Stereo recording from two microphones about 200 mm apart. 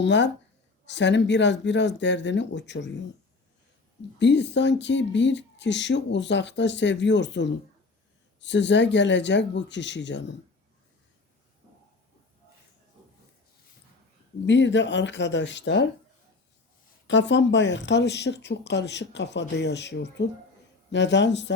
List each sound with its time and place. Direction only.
0.0 s speech: 60° left (ahead or behind)
4.2 s speech: 60° left (ahead or behind)
14.4 s speech: 65° left (ahead or behind)
17.1 s speech: 65° left (ahead or behind)